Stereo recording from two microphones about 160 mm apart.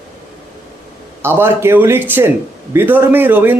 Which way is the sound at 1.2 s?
15° right (ahead or behind).